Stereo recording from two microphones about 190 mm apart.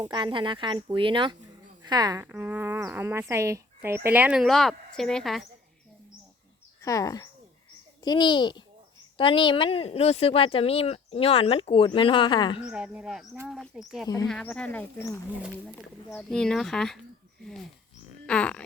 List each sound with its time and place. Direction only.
0.1 s speech: 25° right (ahead or behind); by 5.5 s centre (ahead or behind)
6.8 s speech: 20° left (ahead or behind)
12.7 s speech: 5° right (ahead or behind)
18.3 s speech: 5° left (ahead or behind)